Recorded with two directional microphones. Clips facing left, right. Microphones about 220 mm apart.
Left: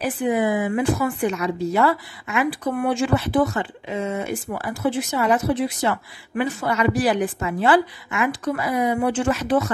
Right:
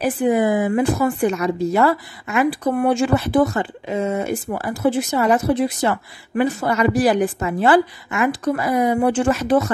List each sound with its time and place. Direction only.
0.0 s speech: 45° right (ahead or behind)